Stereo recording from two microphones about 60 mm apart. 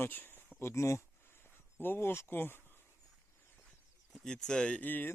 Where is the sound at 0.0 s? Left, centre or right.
Left.